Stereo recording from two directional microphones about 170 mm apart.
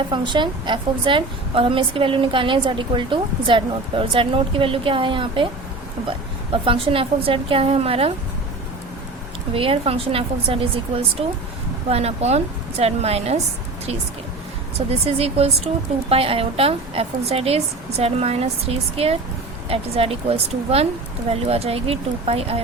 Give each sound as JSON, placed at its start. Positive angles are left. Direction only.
{"t": 0.1, "sound": "a woman's voice", "side_deg": -25}
{"t": 9.6, "sound": "a woman's voice", "side_deg": -35}
{"t": 14.8, "sound": "a woman's voice", "side_deg": -35}